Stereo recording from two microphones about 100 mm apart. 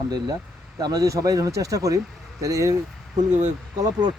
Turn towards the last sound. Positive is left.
turn(degrees=-45)  # may be behind; listen again after turning